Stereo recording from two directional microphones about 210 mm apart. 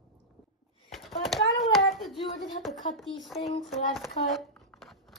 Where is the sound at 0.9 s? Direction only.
Centre (ahead or behind).